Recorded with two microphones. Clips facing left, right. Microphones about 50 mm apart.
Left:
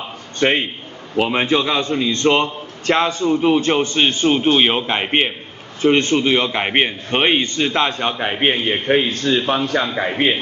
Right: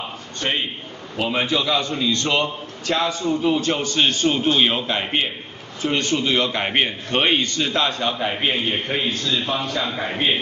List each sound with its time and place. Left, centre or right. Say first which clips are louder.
1.1 s a man's voice: left 5 dB; left
9.7 s a man's voice: left 5 dB; left